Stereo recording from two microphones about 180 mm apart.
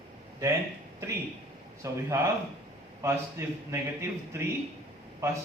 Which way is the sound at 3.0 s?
15° right (ahead or behind).